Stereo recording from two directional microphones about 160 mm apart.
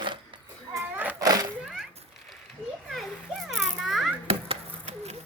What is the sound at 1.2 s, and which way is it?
Cat, 25° right (ahead or behind).